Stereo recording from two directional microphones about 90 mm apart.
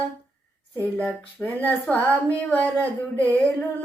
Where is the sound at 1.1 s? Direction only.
15° left (ahead or behind).